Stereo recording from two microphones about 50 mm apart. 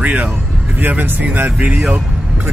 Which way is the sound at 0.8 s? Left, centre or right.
Right.